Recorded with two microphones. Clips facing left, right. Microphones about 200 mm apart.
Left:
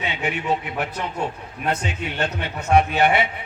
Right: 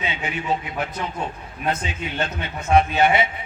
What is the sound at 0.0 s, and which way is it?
A man's voice, 70° left (ahead or behind).